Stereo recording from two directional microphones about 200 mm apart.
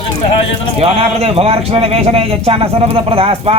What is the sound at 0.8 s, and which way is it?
Speech, 30° right (ahead or behind).